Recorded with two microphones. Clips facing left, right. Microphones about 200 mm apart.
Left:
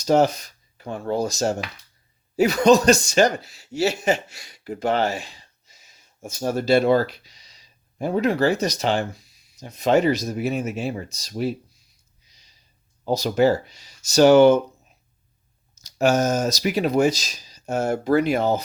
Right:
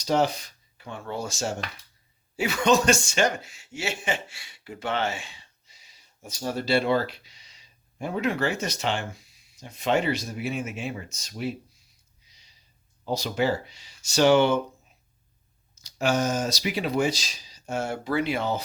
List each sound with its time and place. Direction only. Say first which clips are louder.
0.0 s speech: left 6 dB; 45° left (ahead or behind)
13.1 s speech: left 7 dB; 45° left (ahead or behind)
15.8 s speech: left 5 dB; 45° left (ahead or behind)